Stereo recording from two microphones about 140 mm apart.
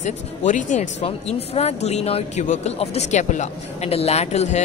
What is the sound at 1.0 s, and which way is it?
Speech, 50° left (ahead or behind).